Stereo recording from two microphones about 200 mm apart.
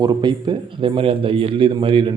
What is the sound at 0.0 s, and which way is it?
Speech, 20° right (ahead or behind).